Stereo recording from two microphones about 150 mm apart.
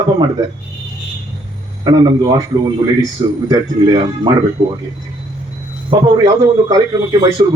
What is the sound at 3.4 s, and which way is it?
Speech, 30° right (ahead or behind).